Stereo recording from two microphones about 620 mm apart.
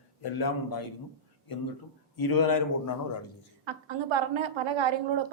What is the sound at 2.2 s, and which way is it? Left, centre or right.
Speech, left.